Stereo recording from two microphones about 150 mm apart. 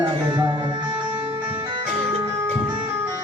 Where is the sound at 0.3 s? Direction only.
20° right (ahead or behind).